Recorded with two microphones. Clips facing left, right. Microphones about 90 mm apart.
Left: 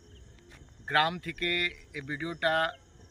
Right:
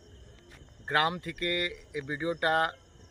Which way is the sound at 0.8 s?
30° right (ahead or behind).